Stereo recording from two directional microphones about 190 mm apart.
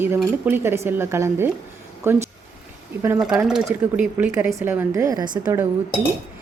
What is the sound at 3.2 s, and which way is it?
Speech, 5° right (ahead or behind).